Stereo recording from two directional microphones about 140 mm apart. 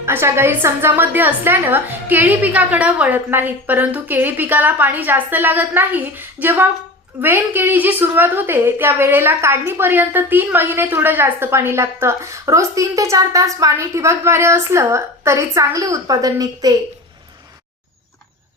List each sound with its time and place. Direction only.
0.0 s a woman's voice: 15° right (ahead or behind)